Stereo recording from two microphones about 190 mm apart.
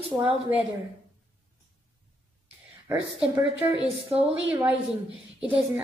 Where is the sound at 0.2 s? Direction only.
10° right (ahead or behind).